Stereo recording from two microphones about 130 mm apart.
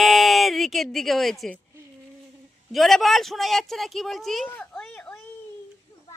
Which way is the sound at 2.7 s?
Centre (ahead or behind).